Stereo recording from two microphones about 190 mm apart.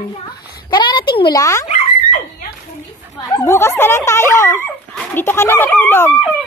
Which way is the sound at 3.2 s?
15° left (ahead or behind).